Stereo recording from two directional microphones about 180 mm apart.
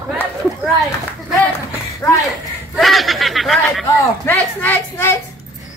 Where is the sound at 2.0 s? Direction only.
15° left (ahead or behind).